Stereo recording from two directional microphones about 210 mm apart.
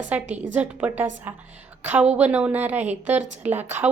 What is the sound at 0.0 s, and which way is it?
A woman's voice, 5° right (ahead or behind).